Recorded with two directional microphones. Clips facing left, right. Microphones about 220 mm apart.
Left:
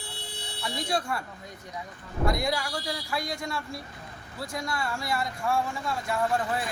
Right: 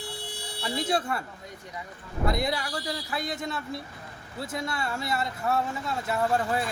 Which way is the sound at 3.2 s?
5° right (ahead or behind).